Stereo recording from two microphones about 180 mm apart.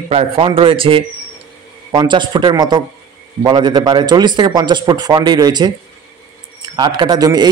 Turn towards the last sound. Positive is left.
turn(degrees=-20)  # may be behind; listen again after turning